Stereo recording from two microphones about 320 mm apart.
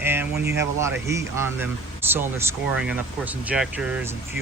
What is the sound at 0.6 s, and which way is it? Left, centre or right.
Speech, centre.